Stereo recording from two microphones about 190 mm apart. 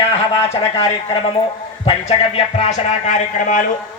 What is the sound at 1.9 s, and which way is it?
A man's voice, 35° left (ahead or behind).